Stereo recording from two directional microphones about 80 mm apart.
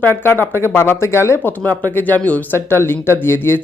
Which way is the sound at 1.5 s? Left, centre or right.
Left.